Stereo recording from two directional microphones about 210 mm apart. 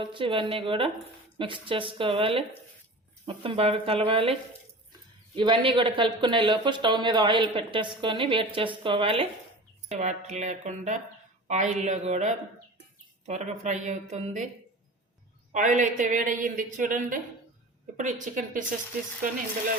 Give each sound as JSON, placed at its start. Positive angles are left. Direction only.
{"t": 0.0, "sound": "speech", "side_deg": -25}
{"t": 15.5, "sound": "speech", "side_deg": -35}